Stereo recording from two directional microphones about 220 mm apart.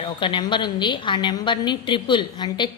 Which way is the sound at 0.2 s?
20° left (ahead or behind).